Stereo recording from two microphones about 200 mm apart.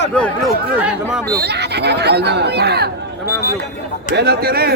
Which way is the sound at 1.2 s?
50° right (ahead or behind).